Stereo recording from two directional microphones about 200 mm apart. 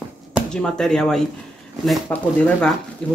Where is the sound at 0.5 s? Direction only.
5° left (ahead or behind).